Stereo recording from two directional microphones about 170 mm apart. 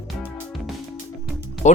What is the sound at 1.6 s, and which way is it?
Speech, 45° left (ahead or behind).